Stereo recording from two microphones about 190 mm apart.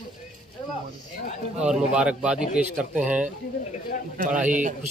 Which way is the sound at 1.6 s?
5° right (ahead or behind).